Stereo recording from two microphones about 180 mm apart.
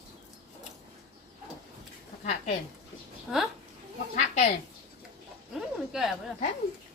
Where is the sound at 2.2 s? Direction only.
40° left (ahead or behind).